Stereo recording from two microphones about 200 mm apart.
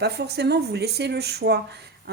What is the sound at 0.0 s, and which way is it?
A woman's voice, 55° right (ahead or behind).